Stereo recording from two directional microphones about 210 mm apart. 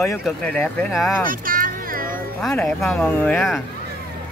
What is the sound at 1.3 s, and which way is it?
Music, 40° right (ahead or behind).